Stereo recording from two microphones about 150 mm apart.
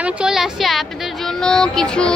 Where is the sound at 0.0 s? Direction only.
5° right (ahead or behind).